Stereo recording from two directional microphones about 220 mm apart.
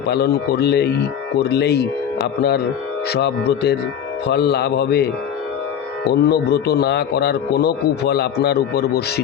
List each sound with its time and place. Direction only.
0.1 s speech: 45° left (ahead or behind)
6.2 s speech: 45° left (ahead or behind)